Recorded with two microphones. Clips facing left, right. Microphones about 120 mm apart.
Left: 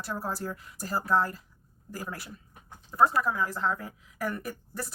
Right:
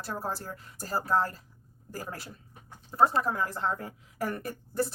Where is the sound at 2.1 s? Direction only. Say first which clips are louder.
Even; 30° right (ahead or behind).